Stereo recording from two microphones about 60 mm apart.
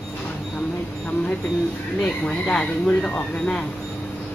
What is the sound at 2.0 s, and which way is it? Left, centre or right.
Speech, centre.